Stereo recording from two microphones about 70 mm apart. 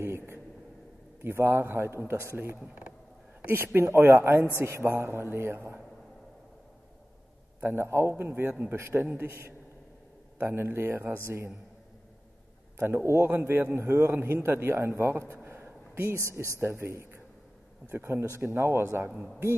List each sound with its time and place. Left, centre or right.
0.0 s a sound: right
1.2 s a man's voice: right
2.6 s mechanisms: right
3.4 s a man's voice: right
7.6 s a man's voice: right
12.7 s a man's voice: right